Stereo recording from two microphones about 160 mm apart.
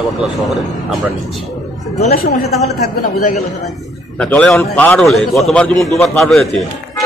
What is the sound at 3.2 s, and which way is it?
Speech, 50° left (ahead or behind).